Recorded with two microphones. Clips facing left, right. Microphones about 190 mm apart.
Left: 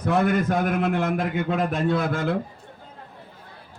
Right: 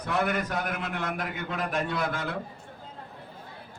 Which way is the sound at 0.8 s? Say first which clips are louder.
Left 9 dB; 55° left (ahead or behind).